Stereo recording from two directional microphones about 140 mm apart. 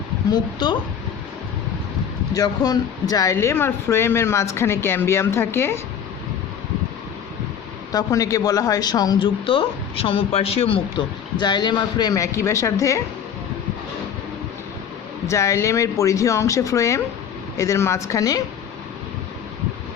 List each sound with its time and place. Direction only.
0.3 s a woman's voice: 30° left (ahead or behind)
2.3 s speech: 25° left (ahead or behind)
3.3 s speech: 15° left (ahead or behind)
7.9 s speech: 25° left (ahead or behind)
15.3 s speech: 20° left (ahead or behind)